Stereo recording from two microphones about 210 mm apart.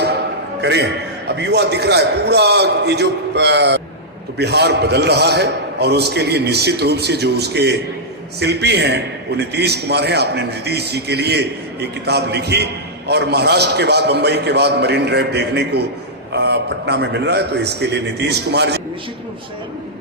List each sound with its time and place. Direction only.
0.6 s a man's voice: 55° right (ahead or behind)